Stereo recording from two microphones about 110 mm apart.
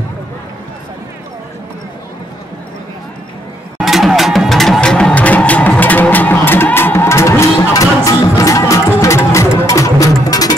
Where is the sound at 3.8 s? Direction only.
Centre (ahead or behind).